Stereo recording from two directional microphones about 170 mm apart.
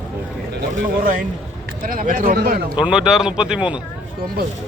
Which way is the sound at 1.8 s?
55° right (ahead or behind).